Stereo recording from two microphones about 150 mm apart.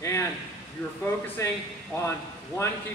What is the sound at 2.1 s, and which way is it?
Speech, 20° left (ahead or behind).